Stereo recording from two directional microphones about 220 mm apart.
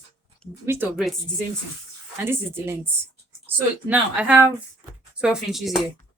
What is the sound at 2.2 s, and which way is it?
Speech, 10° right (ahead or behind).